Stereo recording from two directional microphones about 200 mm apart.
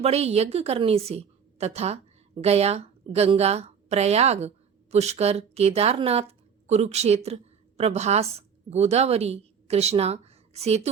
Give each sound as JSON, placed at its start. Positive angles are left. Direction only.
{"t": 0.0, "sound": "a woman's voice", "side_deg": -30}